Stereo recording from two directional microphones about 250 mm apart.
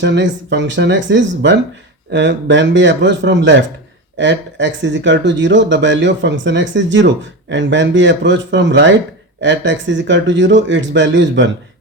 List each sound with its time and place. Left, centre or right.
0.0 s speech: right